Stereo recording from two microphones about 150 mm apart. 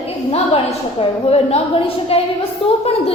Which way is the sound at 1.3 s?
45° left (ahead or behind).